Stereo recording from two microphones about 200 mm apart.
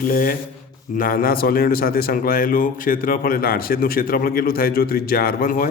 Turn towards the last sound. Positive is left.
turn(degrees=45)  # may be behind; listen again after turning